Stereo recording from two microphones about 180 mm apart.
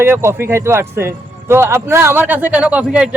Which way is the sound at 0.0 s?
15° right (ahead or behind).